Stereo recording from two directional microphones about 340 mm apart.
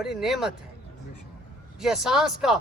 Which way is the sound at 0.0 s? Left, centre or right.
Centre.